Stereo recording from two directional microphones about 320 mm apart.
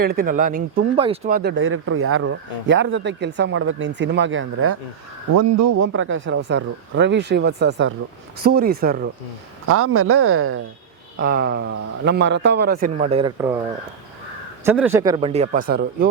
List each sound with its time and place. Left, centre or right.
0.0 s speech: right
5.3 s a man's voice: right
9.6 s speech: right
11.2 s a man's voice: right; by 13.6 s centre
14.6 s speech: centre; by 16.0 s right